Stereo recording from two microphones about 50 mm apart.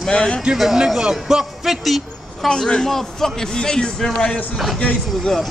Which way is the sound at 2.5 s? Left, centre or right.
Centre.